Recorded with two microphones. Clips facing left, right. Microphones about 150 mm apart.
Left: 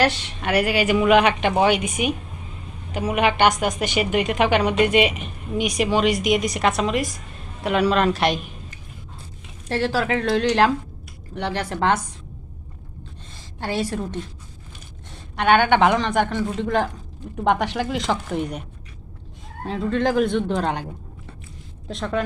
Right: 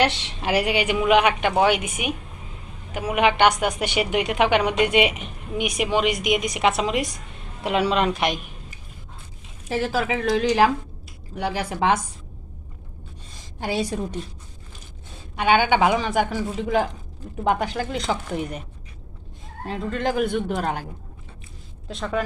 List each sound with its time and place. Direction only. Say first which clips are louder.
0.1 s speech: left 1 dB; 25° right (ahead or behind)
0.9 s a woman's voice: left 2 dB; 5° right (ahead or behind)
6.5 s a woman's voice: even; 20° right (ahead or behind)
9.6 s a woman's voice: left 2 dB; 5° right (ahead or behind)
13.3 s a woman's voice: even; 15° right (ahead or behind)
15.4 s a woman's voice: left 2 dB; 5° right (ahead or behind)
19.6 s a woman's voice: left 4 dB; centre (ahead or behind)
21.8 s a woman's voice: left 1 dB; centre (ahead or behind)